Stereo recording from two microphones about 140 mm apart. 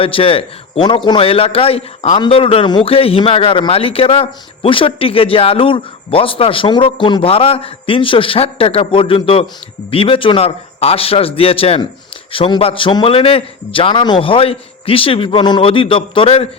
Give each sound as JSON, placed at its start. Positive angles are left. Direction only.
{"t": 0.0, "sound": "a man's voice", "side_deg": 40}
{"t": 2.1, "sound": "a man's voice", "side_deg": 35}